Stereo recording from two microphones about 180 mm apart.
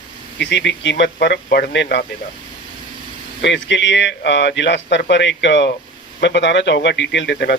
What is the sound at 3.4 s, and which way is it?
Speech, 80° left.